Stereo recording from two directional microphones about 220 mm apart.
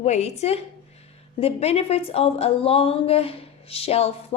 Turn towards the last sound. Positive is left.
turn(degrees=25)  # may be behind; listen again after turning